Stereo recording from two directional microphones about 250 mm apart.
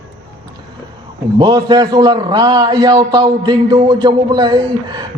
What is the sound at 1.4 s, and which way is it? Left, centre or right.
A man's voice, centre.